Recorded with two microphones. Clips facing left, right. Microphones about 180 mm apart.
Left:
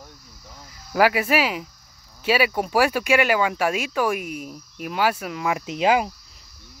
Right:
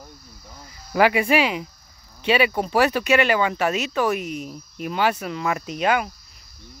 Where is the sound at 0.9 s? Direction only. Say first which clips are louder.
Right 1 dB; 5° left (ahead or behind).